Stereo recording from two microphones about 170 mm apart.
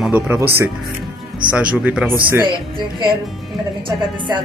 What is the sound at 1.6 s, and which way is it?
Speech, 5° right (ahead or behind).